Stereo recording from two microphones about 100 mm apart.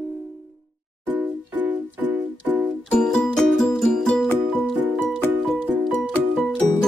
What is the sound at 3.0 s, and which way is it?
Music, 5° left (ahead or behind).